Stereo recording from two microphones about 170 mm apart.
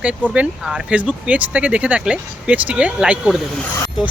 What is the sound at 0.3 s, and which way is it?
Speech, 5° right (ahead or behind).